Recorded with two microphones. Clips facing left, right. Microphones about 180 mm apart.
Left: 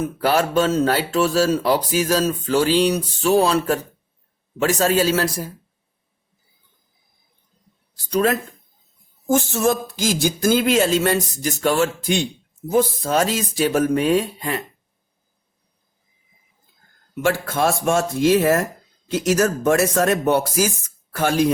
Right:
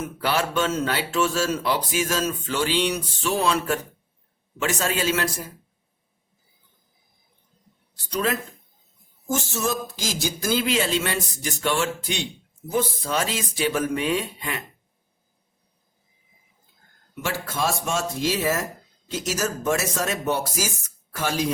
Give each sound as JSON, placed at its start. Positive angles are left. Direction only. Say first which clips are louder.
{"t": 0.0, "sound": "speech", "louder": "left 6 dB", "side_deg": 40}
{"t": 8.1, "sound": "speech", "louder": "left 6 dB", "side_deg": 45}
{"t": 9.3, "sound": "speech", "louder": "left 7 dB", "side_deg": 55}
{"t": 17.2, "sound": "speech", "louder": "left 7 dB", "side_deg": 55}